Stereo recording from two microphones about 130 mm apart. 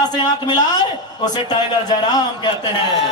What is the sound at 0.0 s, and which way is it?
A man's voice, 30° left (ahead or behind).